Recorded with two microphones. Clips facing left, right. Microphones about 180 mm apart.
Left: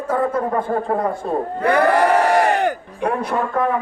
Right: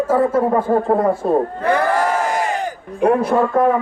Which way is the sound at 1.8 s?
65° left (ahead or behind).